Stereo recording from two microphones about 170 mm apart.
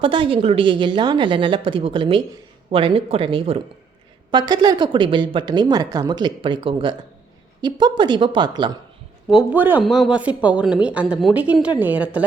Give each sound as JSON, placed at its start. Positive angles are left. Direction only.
{"t": 0.0, "sound": "a woman's voice", "side_deg": -30}
{"t": 9.3, "sound": "a woman's voice", "side_deg": -10}